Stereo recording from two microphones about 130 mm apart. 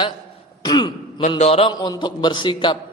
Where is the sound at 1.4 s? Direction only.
50° left (ahead or behind).